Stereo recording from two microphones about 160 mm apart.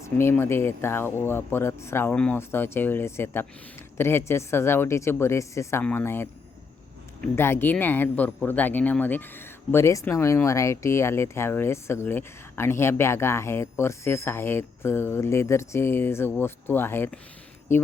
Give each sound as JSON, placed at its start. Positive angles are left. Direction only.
{"t": 0.0, "sound": "speech", "side_deg": 15}
{"t": 7.3, "sound": "speech", "side_deg": 15}